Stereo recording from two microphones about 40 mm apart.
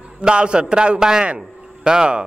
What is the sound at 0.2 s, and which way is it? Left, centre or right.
Speech, right.